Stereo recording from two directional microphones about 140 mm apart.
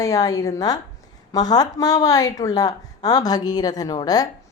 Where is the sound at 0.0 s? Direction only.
25° left (ahead or behind).